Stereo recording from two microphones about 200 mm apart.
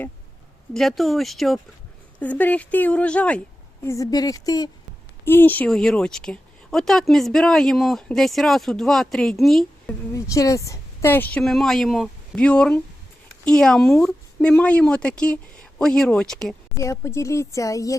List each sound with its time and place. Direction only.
0.7 s a woman's voice: centre (ahead or behind)
10.1 s a woman's voice: 15° left (ahead or behind)
16.7 s a woman's voice: 15° left (ahead or behind)